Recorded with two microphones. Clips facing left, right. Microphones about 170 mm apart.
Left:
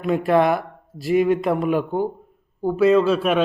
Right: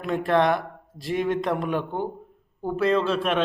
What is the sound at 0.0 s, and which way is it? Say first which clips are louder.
A man's voice: left 4 dB; 5° left (ahead or behind).